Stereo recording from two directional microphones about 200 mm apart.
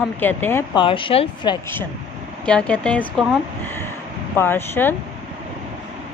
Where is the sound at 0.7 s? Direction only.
25° left (ahead or behind).